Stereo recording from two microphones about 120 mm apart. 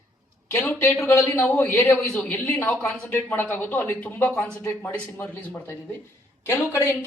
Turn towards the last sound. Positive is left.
turn(degrees=20)  # may be behind; listen again after turning